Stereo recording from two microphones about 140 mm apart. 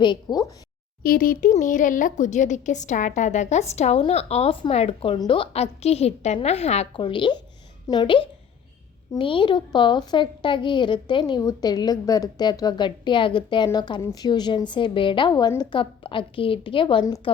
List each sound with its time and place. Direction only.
0.0 s a woman's voice: 30° left (ahead or behind)
1.0 s a woman's voice: 90° left; by 6.8 s 50° left (ahead or behind)
6.9 s a woman's voice: 35° left (ahead or behind)